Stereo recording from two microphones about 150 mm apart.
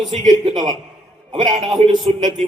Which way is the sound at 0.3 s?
30° right (ahead or behind).